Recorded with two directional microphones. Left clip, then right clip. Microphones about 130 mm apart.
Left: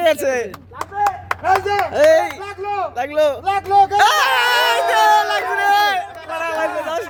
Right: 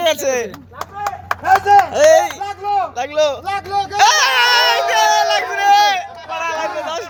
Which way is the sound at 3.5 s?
65° left (ahead or behind).